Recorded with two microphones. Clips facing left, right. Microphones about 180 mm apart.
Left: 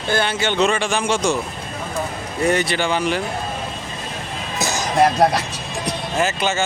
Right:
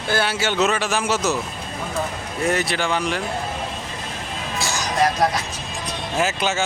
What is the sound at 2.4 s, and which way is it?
Speech, centre (ahead or behind).